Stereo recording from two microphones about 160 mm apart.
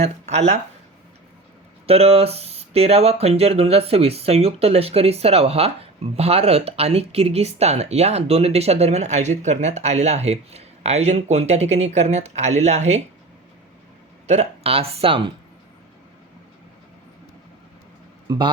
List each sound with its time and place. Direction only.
0.0 s speech: 45° right (ahead or behind)
1.9 s speech: 40° right (ahead or behind)
14.3 s speech: 40° right (ahead or behind)
18.3 s a man's voice: 30° right (ahead or behind)